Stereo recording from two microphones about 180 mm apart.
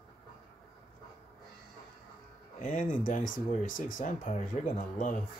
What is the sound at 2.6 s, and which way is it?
Speech, 45° left (ahead or behind).